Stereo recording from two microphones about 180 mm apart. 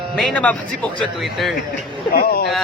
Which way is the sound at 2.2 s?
65° left (ahead or behind).